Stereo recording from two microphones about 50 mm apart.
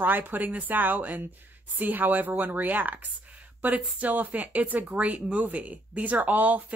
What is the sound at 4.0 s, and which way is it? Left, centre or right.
Speech, right.